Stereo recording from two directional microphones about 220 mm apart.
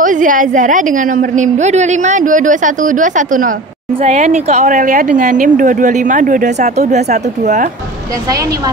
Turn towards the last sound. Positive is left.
turn(degrees=-35)  # may be behind; listen again after turning